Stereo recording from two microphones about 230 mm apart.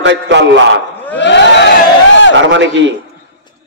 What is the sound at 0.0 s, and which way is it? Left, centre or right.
Speech, right.